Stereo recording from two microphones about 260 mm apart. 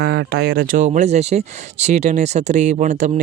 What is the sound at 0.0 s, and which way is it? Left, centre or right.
Speech, right.